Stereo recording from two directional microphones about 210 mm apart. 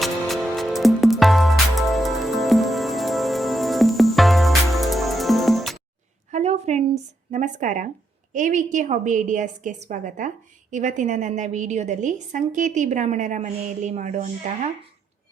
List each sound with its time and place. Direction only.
0.0 s music: centre (ahead or behind)
6.3 s a sound: 30° right (ahead or behind)
7.3 s a woman's voice: 35° right (ahead or behind)